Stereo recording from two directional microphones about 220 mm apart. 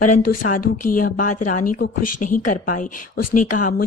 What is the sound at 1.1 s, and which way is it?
Speech, 35° left (ahead or behind).